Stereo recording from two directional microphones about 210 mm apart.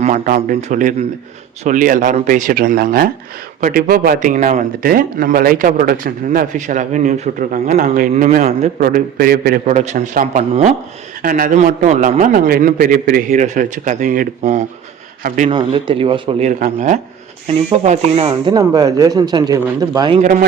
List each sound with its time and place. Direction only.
0.0 s speech: 40° right (ahead or behind)
16.5 s a man's voice: 40° right (ahead or behind); by 20.1 s 20° right (ahead or behind)